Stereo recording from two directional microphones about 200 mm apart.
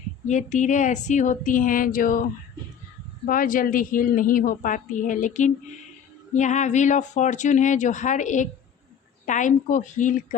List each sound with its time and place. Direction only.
0.3 s a woman's voice: 40° left (ahead or behind)